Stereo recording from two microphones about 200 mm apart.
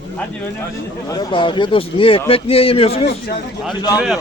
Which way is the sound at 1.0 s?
20° left (ahead or behind).